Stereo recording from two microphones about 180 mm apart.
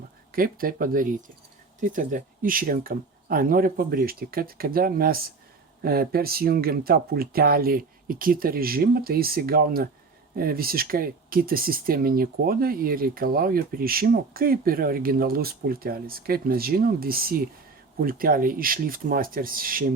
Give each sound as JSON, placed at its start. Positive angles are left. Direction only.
{"t": 0.3, "sound": "speech", "side_deg": -55}